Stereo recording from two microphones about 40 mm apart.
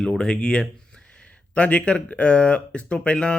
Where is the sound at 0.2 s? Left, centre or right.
Left.